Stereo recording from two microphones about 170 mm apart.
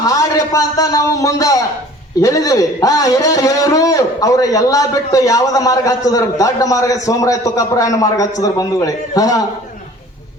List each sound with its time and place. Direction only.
0.0 s a man's voice: 20° left (ahead or behind)